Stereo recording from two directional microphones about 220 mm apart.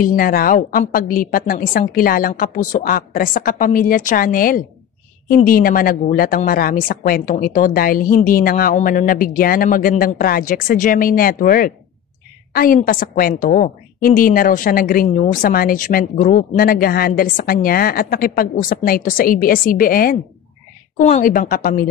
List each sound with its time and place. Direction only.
0.0 s a woman's voice: 40° left (ahead or behind)